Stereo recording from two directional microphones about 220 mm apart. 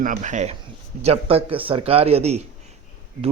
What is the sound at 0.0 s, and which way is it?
A man's voice, 35° right (ahead or behind).